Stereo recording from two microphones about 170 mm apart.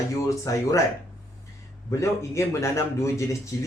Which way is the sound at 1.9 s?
15° left (ahead or behind).